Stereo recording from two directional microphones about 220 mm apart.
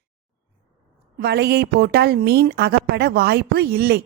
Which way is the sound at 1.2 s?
50° right (ahead or behind).